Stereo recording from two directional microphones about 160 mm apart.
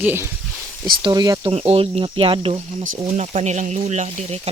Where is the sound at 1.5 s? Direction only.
40° right (ahead or behind).